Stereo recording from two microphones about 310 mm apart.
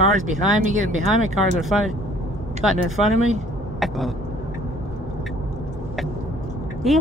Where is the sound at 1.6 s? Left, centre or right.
Centre.